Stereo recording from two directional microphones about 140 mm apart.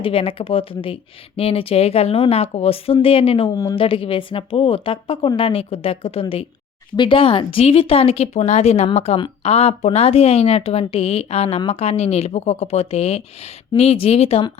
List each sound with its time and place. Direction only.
0.0 s a woman's voice: 40° left (ahead or behind)
3.5 s a woman's voice: 25° left (ahead or behind)
3.8 s a woman's voice: 40° left (ahead or behind)